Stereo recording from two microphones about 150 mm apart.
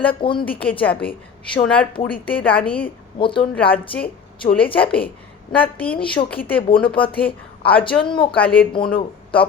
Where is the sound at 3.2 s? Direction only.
35° left (ahead or behind).